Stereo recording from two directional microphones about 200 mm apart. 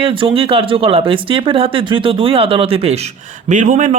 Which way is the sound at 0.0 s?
25° right (ahead or behind).